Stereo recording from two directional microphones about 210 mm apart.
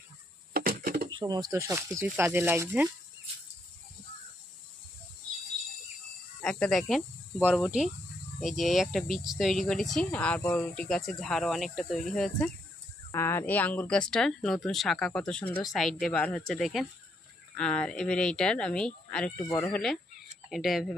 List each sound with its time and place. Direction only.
0.5 s a sound: 45° right (ahead or behind)
1.1 s speech: 20° right (ahead or behind)
6.4 s speech: 5° left (ahead or behind)
13.1 s speech: 10° left (ahead or behind)